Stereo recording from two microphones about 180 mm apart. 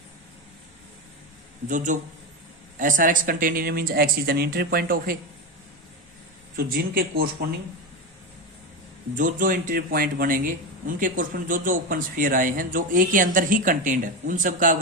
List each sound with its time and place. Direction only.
1.6 s speech: 45° right (ahead or behind)
6.6 s speech: 55° right (ahead or behind)
9.1 s speech: 50° right (ahead or behind)